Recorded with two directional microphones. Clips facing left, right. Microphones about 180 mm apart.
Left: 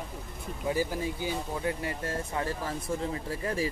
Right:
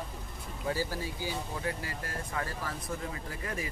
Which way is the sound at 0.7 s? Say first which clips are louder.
Left 4 dB; 20° left (ahead or behind).